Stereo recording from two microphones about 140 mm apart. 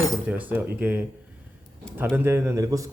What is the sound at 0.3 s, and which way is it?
Speech, 10° right (ahead or behind).